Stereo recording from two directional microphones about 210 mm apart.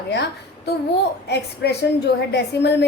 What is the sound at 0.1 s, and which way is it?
A child's voice, 55° left (ahead or behind).